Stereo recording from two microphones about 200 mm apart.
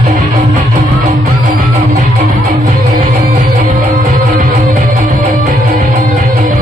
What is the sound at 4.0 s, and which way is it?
Music, 45° right (ahead or behind).